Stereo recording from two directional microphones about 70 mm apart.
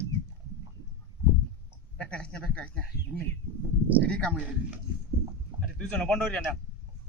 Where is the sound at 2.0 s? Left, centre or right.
Centre.